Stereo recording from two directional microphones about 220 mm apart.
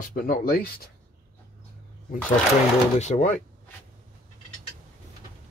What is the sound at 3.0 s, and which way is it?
Speech, 35° left (ahead or behind).